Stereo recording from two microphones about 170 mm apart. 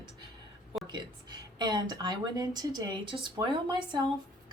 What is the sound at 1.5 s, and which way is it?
Speech, 25° right (ahead or behind).